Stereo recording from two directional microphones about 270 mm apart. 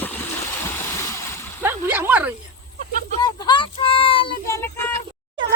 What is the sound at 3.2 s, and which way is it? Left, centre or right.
Child singing, centre.